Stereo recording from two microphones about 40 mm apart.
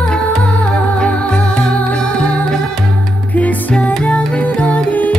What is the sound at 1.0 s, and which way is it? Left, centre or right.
Music, left.